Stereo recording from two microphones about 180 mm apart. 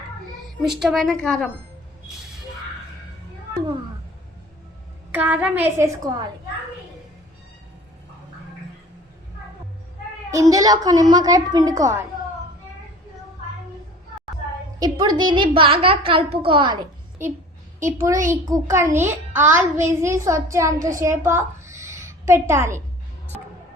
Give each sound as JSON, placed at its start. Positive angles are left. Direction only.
{"t": 0.6, "sound": "a woman's voice", "side_deg": 0}
{"t": 5.1, "sound": "a child's voice", "side_deg": -10}
{"t": 10.5, "sound": "a woman's voice", "side_deg": -20}
{"t": 14.8, "sound": "a woman's voice", "side_deg": -25}
{"t": 17.8, "sound": "a child's voice", "side_deg": -15}
{"t": 21.2, "sound": "a sound", "side_deg": -15}